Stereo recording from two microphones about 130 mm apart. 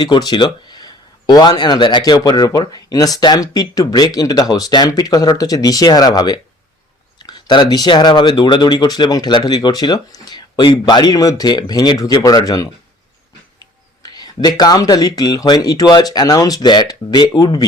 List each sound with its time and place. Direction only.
0.0 s speech: 35° left (ahead or behind)
14.0 s speech: 30° left (ahead or behind)